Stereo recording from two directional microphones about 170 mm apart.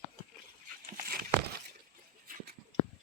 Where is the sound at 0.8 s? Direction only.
55° right (ahead or behind).